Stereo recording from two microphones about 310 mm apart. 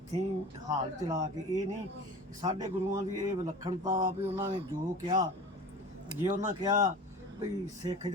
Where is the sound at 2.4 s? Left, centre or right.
Centre.